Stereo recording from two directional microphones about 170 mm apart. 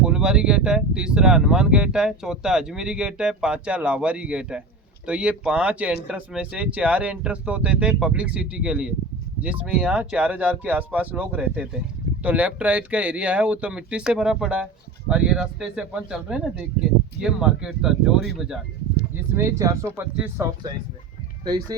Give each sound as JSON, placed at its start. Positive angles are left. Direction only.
{"t": 0.0, "sound": "speech", "side_deg": -5}
{"t": 19.3, "sound": "speech", "side_deg": -15}
{"t": 21.4, "sound": "speech", "side_deg": -25}